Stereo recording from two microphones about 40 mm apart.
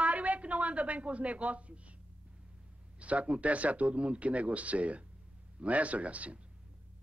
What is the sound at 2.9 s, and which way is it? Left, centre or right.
A woman's voice, right.